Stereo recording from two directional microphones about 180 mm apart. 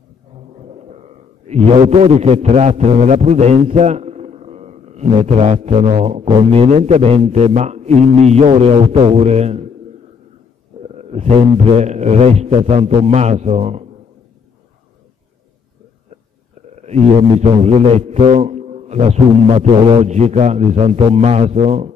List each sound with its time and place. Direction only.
1.5 s a man's voice: 35° right (ahead or behind)
11.0 s a man's voice: 35° right (ahead or behind)
16.8 s a man's voice: 35° right (ahead or behind)